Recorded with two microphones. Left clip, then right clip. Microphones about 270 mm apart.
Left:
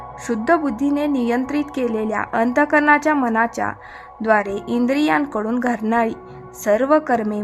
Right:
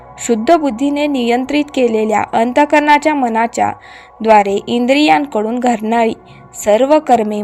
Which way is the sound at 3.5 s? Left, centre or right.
Centre.